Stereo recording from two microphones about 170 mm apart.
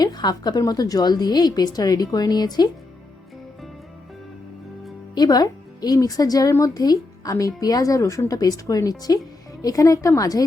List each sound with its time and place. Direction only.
0.0 s speech: 25° left (ahead or behind)
5.1 s speech: 25° left (ahead or behind)